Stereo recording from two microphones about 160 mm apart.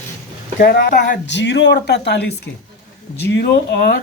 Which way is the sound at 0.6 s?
70° left (ahead or behind).